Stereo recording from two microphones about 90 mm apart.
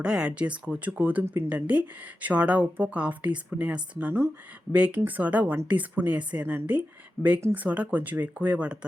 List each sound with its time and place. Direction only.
0.0 s speech: 10° right (ahead or behind)
1.2 s speech: 30° right (ahead or behind)
1.5 s speech: 15° right (ahead or behind)